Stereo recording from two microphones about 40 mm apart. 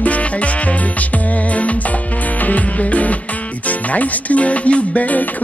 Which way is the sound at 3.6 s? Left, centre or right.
Left.